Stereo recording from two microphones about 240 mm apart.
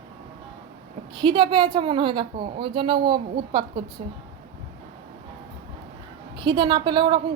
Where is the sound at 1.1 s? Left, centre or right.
Centre.